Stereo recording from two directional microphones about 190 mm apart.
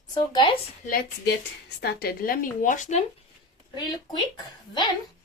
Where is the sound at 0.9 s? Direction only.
55° left (ahead or behind).